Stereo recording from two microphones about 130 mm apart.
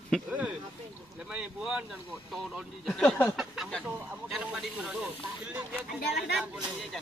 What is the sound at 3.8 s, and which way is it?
Speech, 5° right (ahead or behind).